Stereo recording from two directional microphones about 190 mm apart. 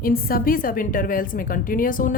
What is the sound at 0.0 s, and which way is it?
Speech, 50° left (ahead or behind).